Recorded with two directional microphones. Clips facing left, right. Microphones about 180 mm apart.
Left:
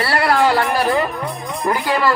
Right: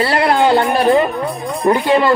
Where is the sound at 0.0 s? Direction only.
20° right (ahead or behind).